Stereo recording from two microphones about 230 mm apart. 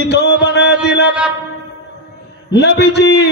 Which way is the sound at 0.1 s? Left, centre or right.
Left.